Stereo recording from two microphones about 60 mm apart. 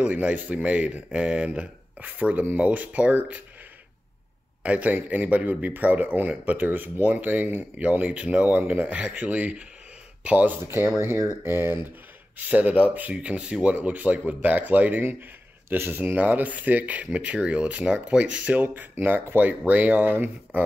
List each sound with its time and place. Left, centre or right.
0.0 s speech: right
4.6 s speech: right
11.0 s speech: right
11.4 s speech: right